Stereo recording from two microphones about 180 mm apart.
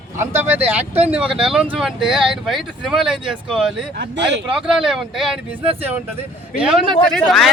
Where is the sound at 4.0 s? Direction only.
75° right (ahead or behind).